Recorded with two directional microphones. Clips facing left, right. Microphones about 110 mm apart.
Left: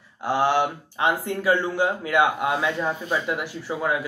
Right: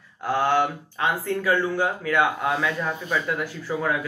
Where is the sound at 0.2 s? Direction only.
20° left (ahead or behind).